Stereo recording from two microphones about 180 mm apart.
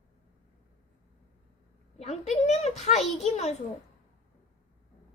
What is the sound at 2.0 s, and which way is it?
A woman's voice, 35° left (ahead or behind).